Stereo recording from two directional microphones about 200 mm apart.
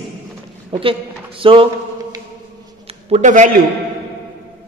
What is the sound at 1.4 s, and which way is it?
Speech, 25° right (ahead or behind).